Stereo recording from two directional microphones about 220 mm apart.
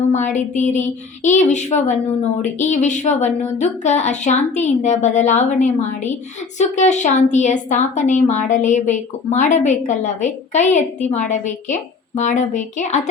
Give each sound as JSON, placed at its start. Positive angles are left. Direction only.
{"t": 0.1, "sound": "a woman's voice", "side_deg": 35}